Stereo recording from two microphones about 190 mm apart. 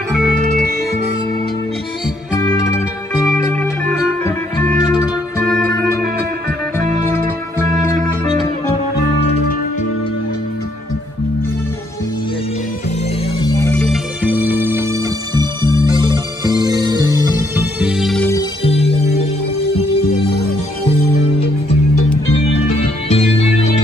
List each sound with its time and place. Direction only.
2.3 s music: 20° left (ahead or behind)
3.3 s music: 10° left (ahead or behind)
8.9 s music: 60° left (ahead or behind)
13.7 s music: 5° left (ahead or behind)
14.2 s music: 10° right (ahead or behind)
17.7 s music: 5° right (ahead or behind)
18.6 s music: 30° left (ahead or behind)
23.0 s organ: 30° left (ahead or behind)